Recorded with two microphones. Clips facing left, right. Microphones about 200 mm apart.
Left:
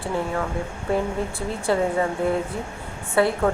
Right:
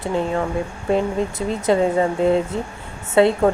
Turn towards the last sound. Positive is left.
turn(degrees=-20)  # may be behind; listen again after turning